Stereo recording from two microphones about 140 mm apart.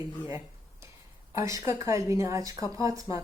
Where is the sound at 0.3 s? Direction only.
20° right (ahead or behind).